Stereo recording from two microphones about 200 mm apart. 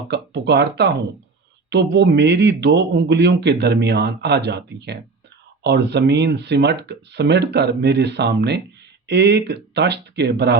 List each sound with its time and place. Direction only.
0.1 s a man's voice: 55° right (ahead or behind)